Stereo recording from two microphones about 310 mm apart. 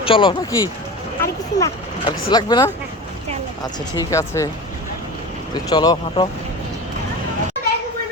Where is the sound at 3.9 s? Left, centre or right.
Centre.